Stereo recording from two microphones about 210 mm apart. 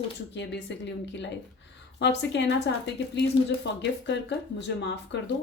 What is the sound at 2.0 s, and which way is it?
A woman's voice, 55° left (ahead or behind).